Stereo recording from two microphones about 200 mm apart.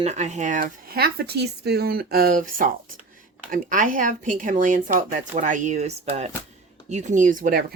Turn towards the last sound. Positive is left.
turn(degrees=-45)  # may be behind; listen again after turning